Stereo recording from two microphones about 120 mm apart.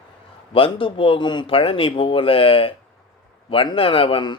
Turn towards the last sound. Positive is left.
turn(degrees=50)  # may be behind; listen again after turning